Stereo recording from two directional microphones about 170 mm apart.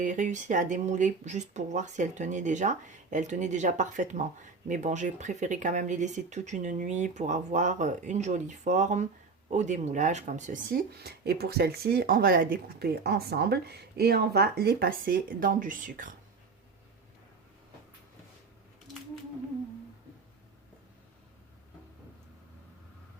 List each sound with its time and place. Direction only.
0.0 s speech: 45° right (ahead or behind)